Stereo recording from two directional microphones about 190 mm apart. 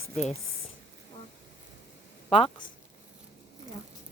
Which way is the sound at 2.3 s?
30° left (ahead or behind).